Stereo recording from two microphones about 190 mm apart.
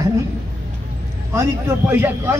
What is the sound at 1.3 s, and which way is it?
A man's voice, 10° right (ahead or behind).